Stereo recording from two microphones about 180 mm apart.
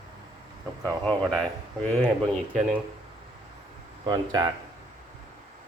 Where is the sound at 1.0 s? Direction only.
5° left (ahead or behind).